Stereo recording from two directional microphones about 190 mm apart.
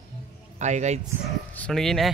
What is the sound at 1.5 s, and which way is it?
Speech, 5° left (ahead or behind).